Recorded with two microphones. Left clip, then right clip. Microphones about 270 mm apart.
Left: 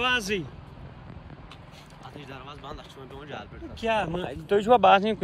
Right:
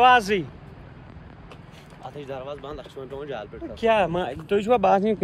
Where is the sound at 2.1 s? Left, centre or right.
Centre.